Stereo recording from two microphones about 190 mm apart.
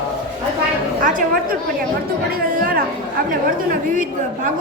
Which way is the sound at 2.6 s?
50° right (ahead or behind).